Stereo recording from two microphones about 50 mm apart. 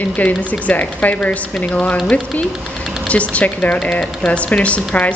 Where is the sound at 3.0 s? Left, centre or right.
Left.